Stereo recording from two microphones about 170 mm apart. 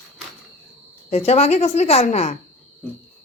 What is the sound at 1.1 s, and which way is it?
A woman's voice, 40° left (ahead or behind).